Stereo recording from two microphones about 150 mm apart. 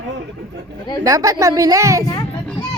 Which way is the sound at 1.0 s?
20° right (ahead or behind).